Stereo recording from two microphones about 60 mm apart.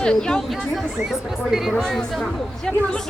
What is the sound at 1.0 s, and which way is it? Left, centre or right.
Speech, centre.